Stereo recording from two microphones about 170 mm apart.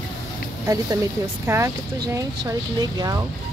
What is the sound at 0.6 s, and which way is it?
Speech, 20° right (ahead or behind).